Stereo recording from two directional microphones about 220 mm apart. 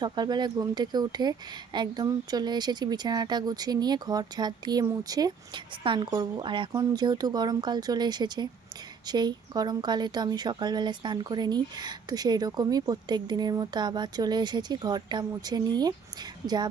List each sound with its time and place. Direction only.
0.0 s a woman's voice: 20° right (ahead or behind)